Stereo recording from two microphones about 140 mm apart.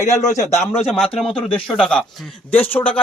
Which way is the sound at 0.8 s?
Centre (ahead or behind).